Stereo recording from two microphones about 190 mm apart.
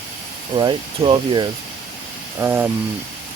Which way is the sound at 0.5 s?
25° right (ahead or behind).